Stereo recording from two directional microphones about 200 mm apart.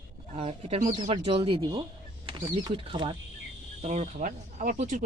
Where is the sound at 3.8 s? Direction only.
35° right (ahead or behind).